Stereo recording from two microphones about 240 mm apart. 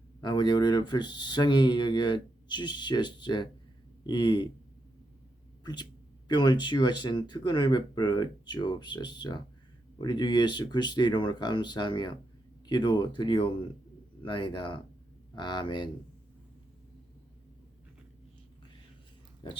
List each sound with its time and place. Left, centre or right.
0.2 s speech: centre
5.6 s speech: centre